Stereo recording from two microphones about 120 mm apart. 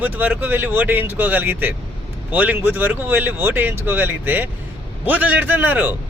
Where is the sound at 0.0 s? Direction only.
15° right (ahead or behind).